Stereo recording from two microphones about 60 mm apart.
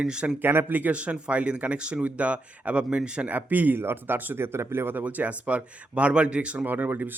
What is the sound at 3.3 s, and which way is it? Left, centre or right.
Speech, right.